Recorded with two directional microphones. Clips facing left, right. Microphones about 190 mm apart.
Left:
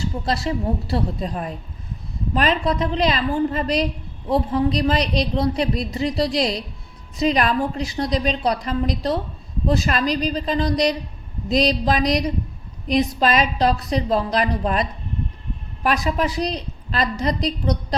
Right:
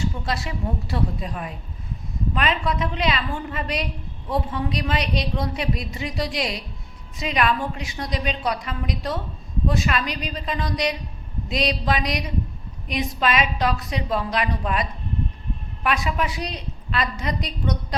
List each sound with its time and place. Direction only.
0.0 s a man's voice: 35° left (ahead or behind)